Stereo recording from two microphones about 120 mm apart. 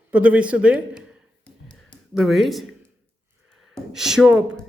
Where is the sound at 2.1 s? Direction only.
Centre (ahead or behind).